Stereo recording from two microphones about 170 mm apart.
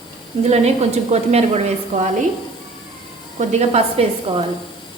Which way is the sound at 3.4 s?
40° right (ahead or behind).